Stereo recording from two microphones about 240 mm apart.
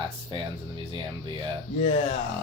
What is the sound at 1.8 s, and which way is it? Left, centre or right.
Speech, left.